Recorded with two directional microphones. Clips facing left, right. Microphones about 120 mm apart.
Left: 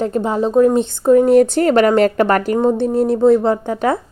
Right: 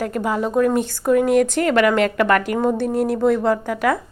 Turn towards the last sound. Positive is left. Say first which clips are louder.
# left 2 dB
turn(degrees=25)  # may be behind; listen again after turning